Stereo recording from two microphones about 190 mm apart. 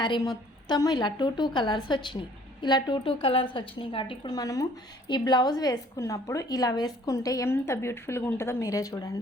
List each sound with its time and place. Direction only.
0.0 s a woman's voice: 25° left (ahead or behind)